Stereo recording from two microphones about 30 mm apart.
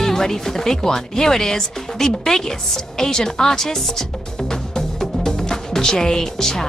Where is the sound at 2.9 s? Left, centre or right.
Centre.